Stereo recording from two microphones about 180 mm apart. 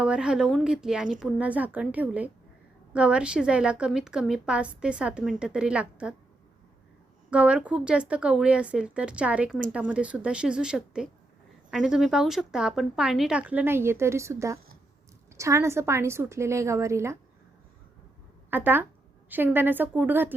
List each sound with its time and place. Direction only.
0.0 s a woman's voice: 5° right (ahead or behind)
7.3 s a woman's voice: 5° right (ahead or behind)
18.5 s speech: 10° right (ahead or behind)